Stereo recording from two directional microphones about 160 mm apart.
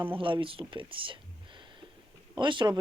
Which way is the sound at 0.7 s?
30° right (ahead or behind).